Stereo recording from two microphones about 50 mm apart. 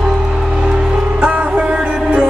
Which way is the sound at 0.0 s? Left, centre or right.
Centre.